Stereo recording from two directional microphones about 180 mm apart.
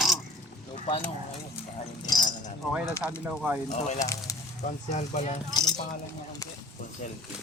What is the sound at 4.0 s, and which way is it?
Speech, 20° left (ahead or behind).